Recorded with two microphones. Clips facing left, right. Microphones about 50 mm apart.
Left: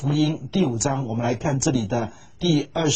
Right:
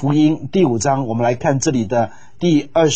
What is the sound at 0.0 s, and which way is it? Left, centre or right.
A man's voice, right.